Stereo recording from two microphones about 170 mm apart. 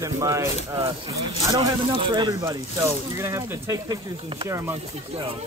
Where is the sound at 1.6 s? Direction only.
30° right (ahead or behind).